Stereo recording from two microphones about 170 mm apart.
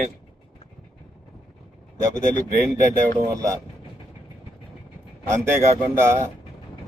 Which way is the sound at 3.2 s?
15° right (ahead or behind).